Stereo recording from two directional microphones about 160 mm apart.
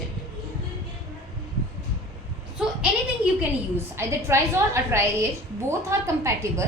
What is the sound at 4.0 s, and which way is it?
A woman's voice, 15° right (ahead or behind).